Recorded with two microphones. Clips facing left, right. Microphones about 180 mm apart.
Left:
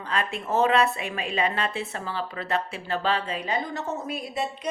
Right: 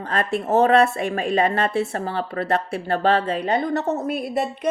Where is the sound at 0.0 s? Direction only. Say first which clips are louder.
Right 6 dB; 45° right (ahead or behind).